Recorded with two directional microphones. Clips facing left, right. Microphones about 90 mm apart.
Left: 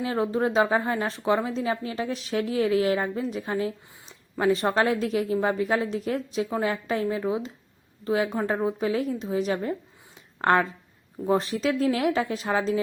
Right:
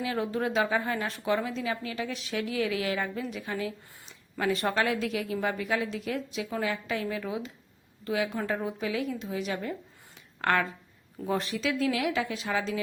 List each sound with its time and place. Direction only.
0.0 s a woman's voice: 35° left (ahead or behind)